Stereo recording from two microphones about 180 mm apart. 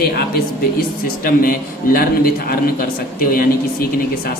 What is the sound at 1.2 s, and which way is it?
A man's voice, 50° left (ahead or behind).